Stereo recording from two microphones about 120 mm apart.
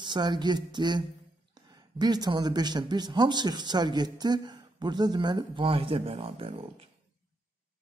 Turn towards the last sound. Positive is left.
turn(degrees=-50)  # may be behind; listen again after turning